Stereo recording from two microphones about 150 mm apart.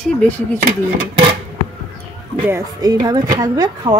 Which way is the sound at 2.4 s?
20° right (ahead or behind).